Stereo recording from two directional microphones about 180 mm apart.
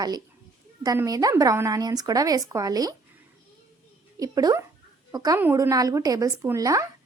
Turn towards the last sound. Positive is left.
turn(degrees=-20)  # may be behind; listen again after turning